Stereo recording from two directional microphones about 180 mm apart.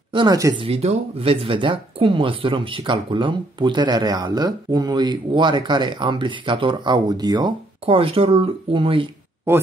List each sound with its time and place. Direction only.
0.1 s speech: 25° right (ahead or behind)
0.7 s speech: 35° right (ahead or behind)
9.5 s speech: 15° right (ahead or behind)